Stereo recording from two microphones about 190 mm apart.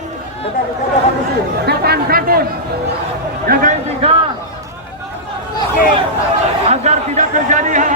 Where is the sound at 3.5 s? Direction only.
45° right (ahead or behind).